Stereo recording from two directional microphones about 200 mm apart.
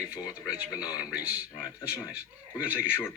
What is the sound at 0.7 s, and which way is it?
Speech, 20° left (ahead or behind).